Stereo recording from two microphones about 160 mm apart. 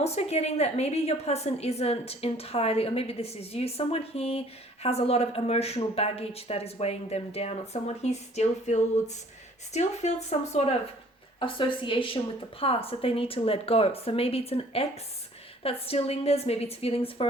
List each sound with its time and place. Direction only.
0.0 s a woman's voice: 40° left (ahead or behind)
11.3 s a woman's voice: 30° left (ahead or behind)